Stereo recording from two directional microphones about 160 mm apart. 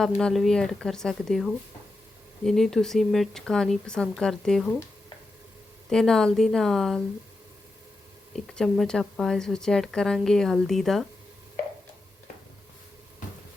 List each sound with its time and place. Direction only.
0.0 s speech: 5° left (ahead or behind)
5.9 s speech: 5° left (ahead or behind)
8.5 s speech: centre (ahead or behind)